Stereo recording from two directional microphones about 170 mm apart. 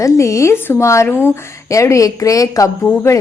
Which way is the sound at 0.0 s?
15° left (ahead or behind).